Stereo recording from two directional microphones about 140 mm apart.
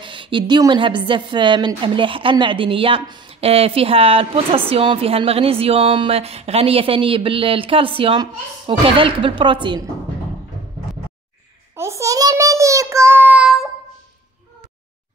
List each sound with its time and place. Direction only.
0.0 s a woman's voice: 35° right (ahead or behind)
11.7 s child singing: 20° right (ahead or behind)